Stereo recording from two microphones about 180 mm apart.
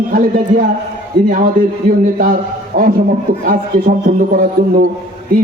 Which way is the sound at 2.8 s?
55° right (ahead or behind).